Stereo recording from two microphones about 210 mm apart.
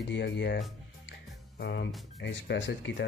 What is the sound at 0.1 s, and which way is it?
Speech, 55° left (ahead or behind).